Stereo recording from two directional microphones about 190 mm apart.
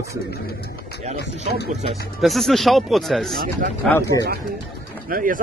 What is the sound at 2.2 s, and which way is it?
Speech, centre (ahead or behind).